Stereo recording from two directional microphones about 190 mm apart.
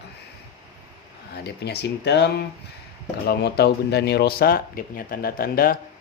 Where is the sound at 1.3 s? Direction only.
60° left (ahead or behind).